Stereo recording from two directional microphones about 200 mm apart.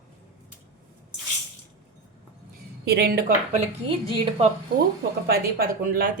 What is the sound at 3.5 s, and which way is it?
A woman's voice, 30° right (ahead or behind).